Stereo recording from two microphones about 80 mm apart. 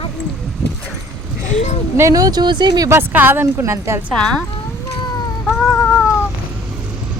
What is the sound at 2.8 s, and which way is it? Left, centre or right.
Speech, right.